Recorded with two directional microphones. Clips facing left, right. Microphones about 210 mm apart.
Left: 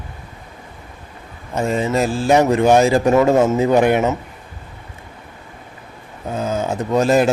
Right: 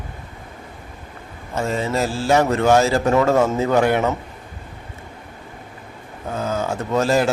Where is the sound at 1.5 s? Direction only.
15° left (ahead or behind).